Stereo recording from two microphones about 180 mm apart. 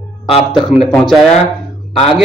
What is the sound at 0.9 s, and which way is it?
Speech, 5° left (ahead or behind).